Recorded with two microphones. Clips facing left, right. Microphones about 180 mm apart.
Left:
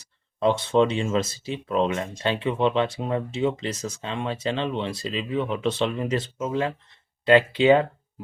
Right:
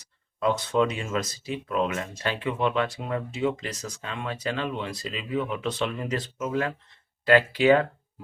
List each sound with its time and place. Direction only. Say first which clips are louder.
0.0 s speech: left 4 dB; 25° left (ahead or behind)